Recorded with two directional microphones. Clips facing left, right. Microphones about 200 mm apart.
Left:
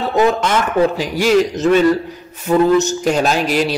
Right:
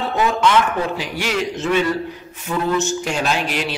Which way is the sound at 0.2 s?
40° left (ahead or behind).